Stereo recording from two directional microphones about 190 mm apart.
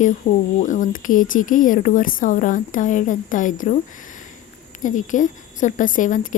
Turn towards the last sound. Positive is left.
turn(degrees=45)  # may be behind; listen again after turning